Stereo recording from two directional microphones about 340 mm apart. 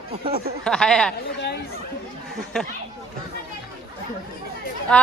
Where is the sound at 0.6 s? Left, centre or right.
Centre.